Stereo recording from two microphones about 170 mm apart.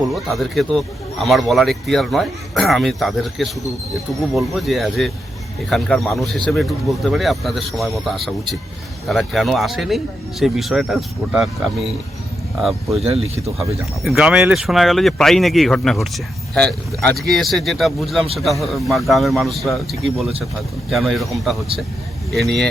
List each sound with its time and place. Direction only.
0.1 s speech: centre (ahead or behind)
13.0 s speech: 35° right (ahead or behind)
14.0 s speech: centre (ahead or behind)